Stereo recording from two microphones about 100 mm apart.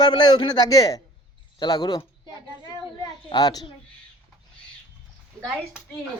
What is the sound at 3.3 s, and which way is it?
Speech, 45° left (ahead or behind).